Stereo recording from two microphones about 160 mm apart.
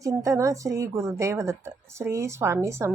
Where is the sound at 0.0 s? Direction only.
20° right (ahead or behind).